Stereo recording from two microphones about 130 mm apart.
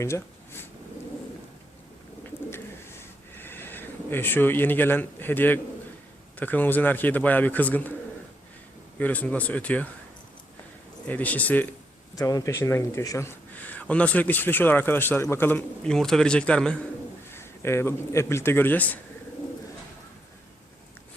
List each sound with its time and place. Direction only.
0.0 s a sound: 20° left (ahead or behind)
3.0 s a sound: 15° left (ahead or behind)
6.4 s speech: 15° left (ahead or behind)
9.0 s speech: 10° left (ahead or behind)
11.1 s speech: 10° left (ahead or behind)
12.1 s speech: 25° left (ahead or behind); by 16.7 s 5° left (ahead or behind)
17.3 s a man's voice: 20° left (ahead or behind)